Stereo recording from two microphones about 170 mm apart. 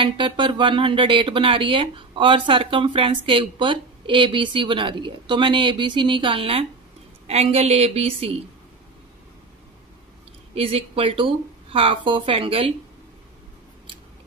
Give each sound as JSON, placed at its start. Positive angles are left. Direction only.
{"t": 0.0, "sound": "speech", "side_deg": -30}
{"t": 10.5, "sound": "speech", "side_deg": -35}